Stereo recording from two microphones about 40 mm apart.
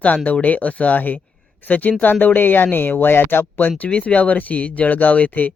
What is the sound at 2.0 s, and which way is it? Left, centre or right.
Speech, left.